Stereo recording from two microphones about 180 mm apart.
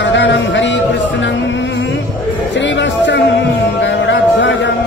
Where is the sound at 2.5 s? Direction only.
80° left.